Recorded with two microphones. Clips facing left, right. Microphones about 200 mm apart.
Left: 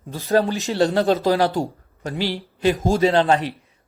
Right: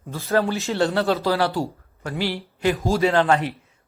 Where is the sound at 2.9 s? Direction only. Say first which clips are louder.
Left 1 dB; 20° left (ahead or behind).